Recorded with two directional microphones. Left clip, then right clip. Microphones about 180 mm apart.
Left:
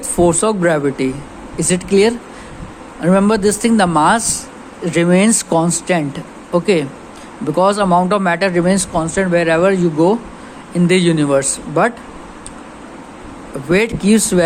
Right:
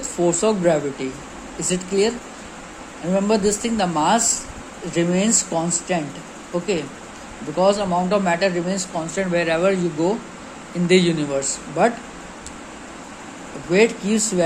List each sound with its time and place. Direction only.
0.2 s speech: 45° left (ahead or behind)
13.7 s speech: 45° left (ahead or behind)